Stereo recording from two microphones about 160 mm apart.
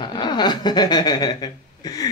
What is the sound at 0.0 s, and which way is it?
A child's voice, 30° left (ahead or behind).